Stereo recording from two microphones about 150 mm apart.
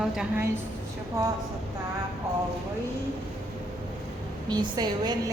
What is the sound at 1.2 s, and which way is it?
Speech, 20° right (ahead or behind).